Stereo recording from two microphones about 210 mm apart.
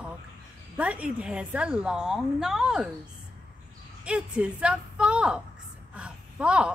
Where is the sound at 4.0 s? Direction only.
5° right (ahead or behind).